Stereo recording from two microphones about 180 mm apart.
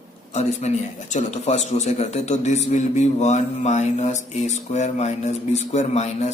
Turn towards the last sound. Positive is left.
turn(degrees=40)  # may be behind; listen again after turning